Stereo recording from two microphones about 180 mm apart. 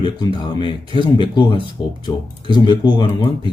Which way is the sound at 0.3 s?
25° left (ahead or behind).